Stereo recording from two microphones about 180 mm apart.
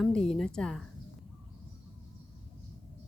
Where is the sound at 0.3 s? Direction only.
Centre (ahead or behind).